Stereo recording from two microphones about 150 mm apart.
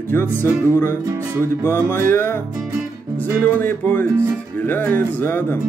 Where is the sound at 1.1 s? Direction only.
20° right (ahead or behind).